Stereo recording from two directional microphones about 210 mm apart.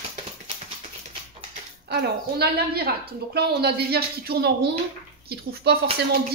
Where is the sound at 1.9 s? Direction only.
50° right (ahead or behind).